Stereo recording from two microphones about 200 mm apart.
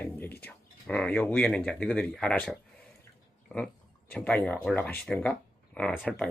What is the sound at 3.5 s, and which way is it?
Speech, 5° left (ahead or behind).